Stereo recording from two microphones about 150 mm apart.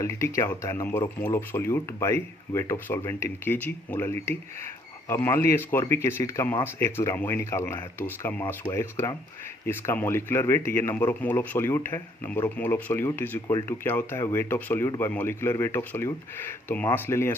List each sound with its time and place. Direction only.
0.0 s speech: 20° left (ahead or behind)